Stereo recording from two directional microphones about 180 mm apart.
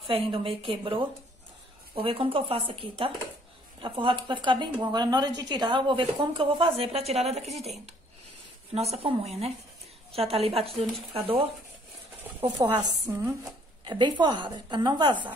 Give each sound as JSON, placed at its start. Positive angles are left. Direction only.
{"t": 0.1, "sound": "a woman's voice", "side_deg": -30}
{"t": 8.7, "sound": "a woman's voice", "side_deg": -35}
{"t": 12.7, "sound": "a woman's voice", "side_deg": -15}